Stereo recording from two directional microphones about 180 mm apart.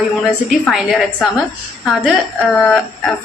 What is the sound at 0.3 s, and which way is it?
A woman's voice, centre (ahead or behind).